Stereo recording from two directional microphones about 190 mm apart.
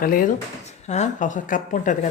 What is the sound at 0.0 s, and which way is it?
A woman's voice, 50° left (ahead or behind).